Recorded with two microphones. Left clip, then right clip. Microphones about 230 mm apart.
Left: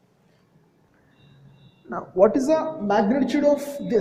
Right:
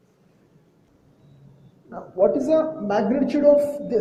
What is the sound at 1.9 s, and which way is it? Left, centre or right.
A woman's voice, left.